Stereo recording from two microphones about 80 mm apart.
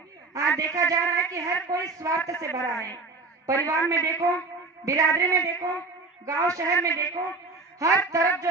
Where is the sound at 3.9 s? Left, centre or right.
Right.